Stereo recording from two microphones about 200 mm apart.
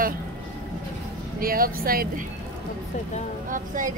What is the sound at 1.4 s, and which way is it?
Speech, 45° right (ahead or behind).